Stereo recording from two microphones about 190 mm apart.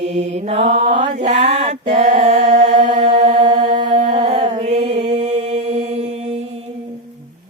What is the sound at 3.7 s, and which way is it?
Humming, 25° right (ahead or behind).